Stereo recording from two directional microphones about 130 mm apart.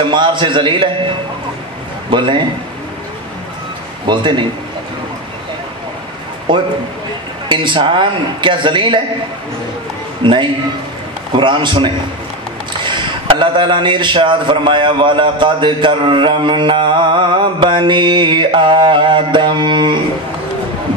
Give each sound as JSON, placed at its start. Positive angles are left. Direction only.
{"t": 0.1, "sound": "a man's voice", "side_deg": -35}
{"t": 2.0, "sound": "a man's voice", "side_deg": -40}
{"t": 4.1, "sound": "a man's voice", "side_deg": -40}
{"t": 6.5, "sound": "a man's voice", "side_deg": -40}
{"t": 10.2, "sound": "a man's voice", "side_deg": -40}